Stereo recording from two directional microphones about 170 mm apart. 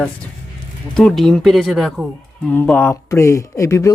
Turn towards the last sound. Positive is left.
turn(degrees=20)  # may be behind; listen again after turning